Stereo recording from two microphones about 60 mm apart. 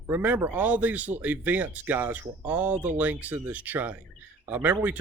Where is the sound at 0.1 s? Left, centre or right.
Right.